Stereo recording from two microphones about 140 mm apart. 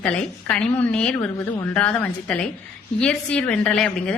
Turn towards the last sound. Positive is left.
turn(degrees=5)  # may be behind; listen again after turning